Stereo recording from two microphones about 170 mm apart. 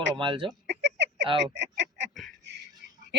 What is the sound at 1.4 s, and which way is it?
Speech, 90° right.